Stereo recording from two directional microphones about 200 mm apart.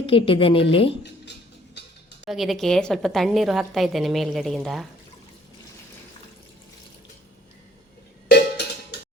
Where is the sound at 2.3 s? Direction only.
Centre (ahead or behind).